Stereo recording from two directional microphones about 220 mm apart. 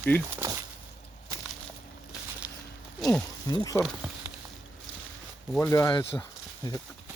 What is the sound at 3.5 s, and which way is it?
Speech, 15° left (ahead or behind).